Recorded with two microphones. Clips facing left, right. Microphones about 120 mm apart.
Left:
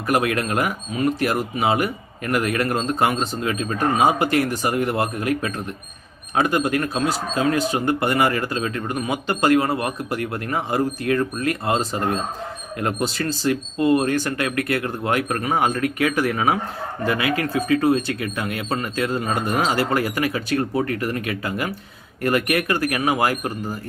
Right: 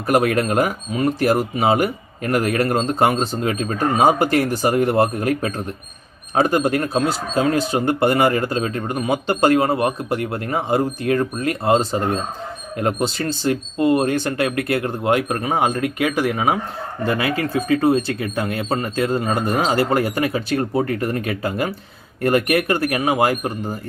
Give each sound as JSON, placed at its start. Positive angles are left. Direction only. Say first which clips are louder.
{"t": 0.1, "sound": "speech", "louder": "right 4 dB", "side_deg": -35}
{"t": 17.1, "sound": "speech", "louder": "right 1 dB", "side_deg": -30}